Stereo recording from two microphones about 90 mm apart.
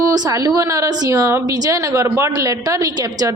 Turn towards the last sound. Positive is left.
turn(degrees=-45)  # may be behind; listen again after turning